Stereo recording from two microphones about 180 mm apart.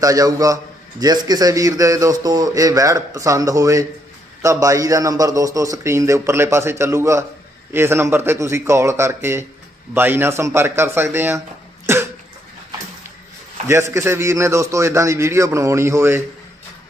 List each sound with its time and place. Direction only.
0.0 s a man's voice: 20° right (ahead or behind)
13.7 s a man's voice: 15° right (ahead or behind)